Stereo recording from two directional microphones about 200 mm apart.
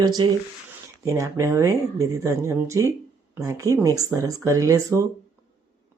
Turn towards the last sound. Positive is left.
turn(degrees=-15)  # may be behind; listen again after turning